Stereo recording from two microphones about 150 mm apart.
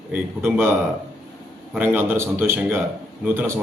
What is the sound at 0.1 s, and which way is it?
Speech, 10° right (ahead or behind).